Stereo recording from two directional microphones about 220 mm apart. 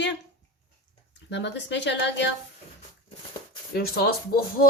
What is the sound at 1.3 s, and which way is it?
Speech, 50° left (ahead or behind).